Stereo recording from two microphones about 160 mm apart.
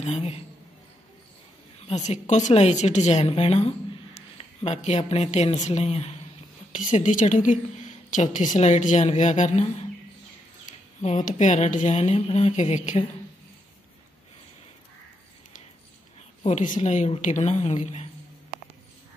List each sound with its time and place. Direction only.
0.0 s a woman's voice: 45° left (ahead or behind)
1.9 s a woman's voice: 50° left (ahead or behind)
6.7 s a woman's voice: 50° left (ahead or behind)
11.0 s a woman's voice: 50° left (ahead or behind)
16.4 s a woman's voice: 50° left (ahead or behind)